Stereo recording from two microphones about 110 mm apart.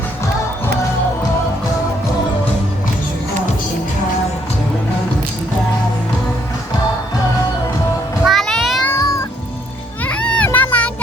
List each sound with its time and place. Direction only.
8.2 s music: centre (ahead or behind)
9.0 s meow: 30° left (ahead or behind)
10.0 s children playing: 10° left (ahead or behind)